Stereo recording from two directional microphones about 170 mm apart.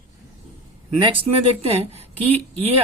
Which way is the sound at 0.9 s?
30° right (ahead or behind).